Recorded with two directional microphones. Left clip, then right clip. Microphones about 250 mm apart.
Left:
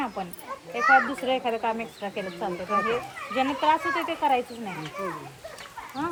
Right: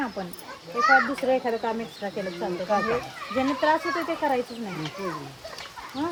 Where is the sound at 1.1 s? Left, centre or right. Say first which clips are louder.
Right 2 dB; centre.